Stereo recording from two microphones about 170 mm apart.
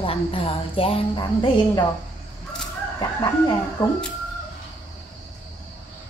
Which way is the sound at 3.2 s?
20° left (ahead or behind).